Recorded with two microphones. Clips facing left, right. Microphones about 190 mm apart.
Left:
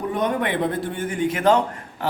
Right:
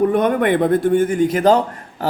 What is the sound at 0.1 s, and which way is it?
A man's voice, 55° right (ahead or behind).